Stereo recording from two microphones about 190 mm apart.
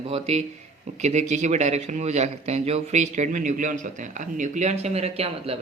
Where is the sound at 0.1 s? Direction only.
35° right (ahead or behind).